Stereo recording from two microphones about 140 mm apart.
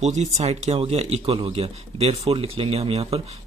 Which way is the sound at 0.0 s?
55° right (ahead or behind).